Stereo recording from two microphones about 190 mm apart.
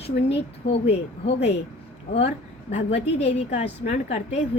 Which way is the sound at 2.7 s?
35° left (ahead or behind).